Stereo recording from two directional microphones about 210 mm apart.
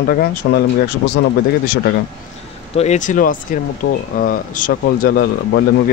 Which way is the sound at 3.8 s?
70° left (ahead or behind).